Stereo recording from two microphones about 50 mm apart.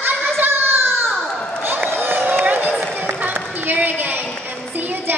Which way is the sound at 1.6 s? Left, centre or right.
Right.